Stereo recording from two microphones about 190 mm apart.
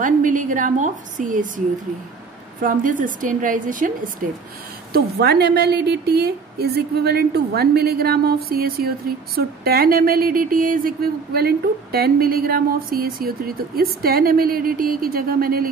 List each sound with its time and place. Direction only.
0.0 s speech: 45° right (ahead or behind)
2.6 s speech: 45° right (ahead or behind)
4.9 s a woman's voice: 60° right (ahead or behind)